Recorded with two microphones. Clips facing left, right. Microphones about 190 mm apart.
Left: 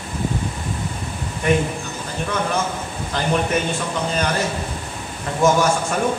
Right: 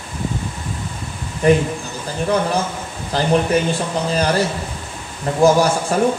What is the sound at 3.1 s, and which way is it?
Speech, 35° right (ahead or behind).